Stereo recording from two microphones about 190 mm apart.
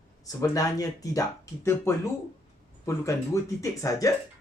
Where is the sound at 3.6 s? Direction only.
15° left (ahead or behind).